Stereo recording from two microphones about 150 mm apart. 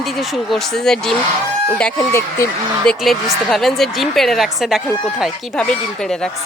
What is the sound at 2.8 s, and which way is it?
A woman's voice, centre (ahead or behind).